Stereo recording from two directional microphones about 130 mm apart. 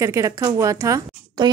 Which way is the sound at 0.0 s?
25° right (ahead or behind).